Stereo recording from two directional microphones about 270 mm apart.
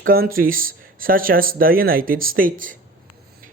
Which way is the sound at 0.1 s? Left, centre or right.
Right.